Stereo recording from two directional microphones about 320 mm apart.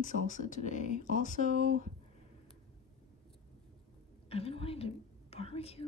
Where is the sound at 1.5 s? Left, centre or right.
Right.